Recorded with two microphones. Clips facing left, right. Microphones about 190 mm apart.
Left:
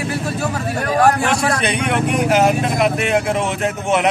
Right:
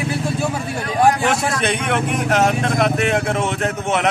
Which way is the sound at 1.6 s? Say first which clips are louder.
Left 1 dB; centre (ahead or behind).